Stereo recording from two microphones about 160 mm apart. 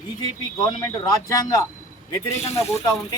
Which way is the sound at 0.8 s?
20° left (ahead or behind).